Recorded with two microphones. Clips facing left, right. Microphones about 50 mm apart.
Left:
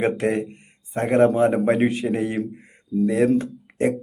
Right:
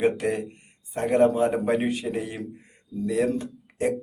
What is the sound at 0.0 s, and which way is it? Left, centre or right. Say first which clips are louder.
Speech: left 2 dB; left.